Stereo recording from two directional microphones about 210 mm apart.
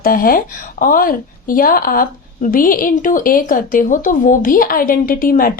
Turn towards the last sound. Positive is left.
turn(degrees=45)  # may be behind; listen again after turning